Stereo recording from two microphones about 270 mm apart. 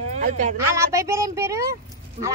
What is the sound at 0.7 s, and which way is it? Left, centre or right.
Speech, centre.